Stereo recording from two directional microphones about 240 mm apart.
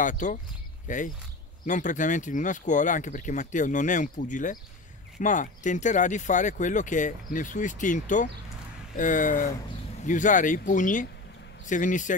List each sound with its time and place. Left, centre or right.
0.0 s speech: left